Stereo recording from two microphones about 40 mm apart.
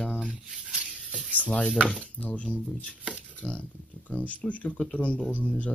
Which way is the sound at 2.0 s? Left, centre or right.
Left.